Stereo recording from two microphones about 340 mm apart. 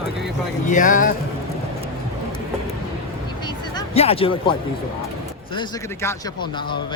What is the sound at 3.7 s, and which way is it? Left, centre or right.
A man's voice, centre.